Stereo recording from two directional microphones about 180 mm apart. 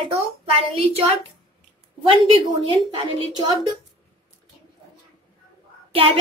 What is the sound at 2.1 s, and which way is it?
Speech, 30° right (ahead or behind).